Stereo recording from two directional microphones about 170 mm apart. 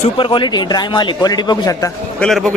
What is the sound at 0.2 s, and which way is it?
Speech, 30° left (ahead or behind).